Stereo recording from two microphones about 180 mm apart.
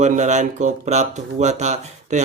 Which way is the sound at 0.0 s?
40° right (ahead or behind).